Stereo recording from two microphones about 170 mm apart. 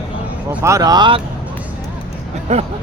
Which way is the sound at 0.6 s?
20° right (ahead or behind).